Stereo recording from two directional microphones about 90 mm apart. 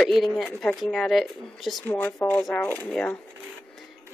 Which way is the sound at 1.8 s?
20° left (ahead or behind).